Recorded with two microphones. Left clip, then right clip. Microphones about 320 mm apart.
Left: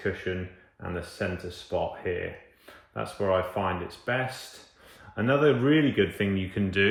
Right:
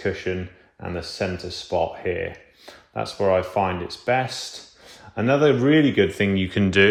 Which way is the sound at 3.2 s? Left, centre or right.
Right.